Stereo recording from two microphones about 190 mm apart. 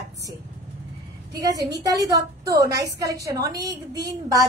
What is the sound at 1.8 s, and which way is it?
A woman's voice, 20° right (ahead or behind).